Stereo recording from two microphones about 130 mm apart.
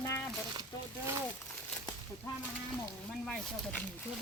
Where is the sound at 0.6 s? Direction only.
25° right (ahead or behind).